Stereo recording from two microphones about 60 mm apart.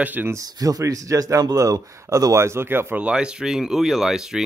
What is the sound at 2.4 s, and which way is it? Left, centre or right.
Speech, right.